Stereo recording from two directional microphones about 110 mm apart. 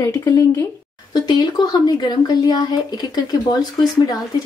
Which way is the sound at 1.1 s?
40° left (ahead or behind).